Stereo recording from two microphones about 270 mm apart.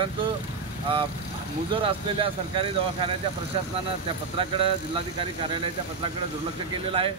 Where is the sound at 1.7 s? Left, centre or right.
Centre.